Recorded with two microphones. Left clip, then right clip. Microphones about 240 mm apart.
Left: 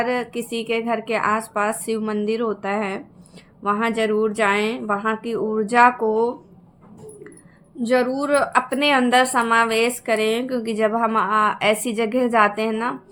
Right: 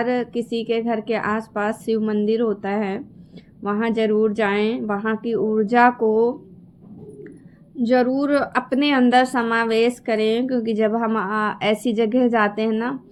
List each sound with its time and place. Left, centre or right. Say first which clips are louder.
0.0 s a woman's voice: right 1 dB; centre
7.8 s a woman's voice: right 1 dB; centre